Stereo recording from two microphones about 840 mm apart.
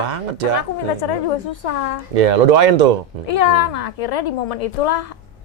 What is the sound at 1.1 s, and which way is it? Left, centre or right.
Speech, left.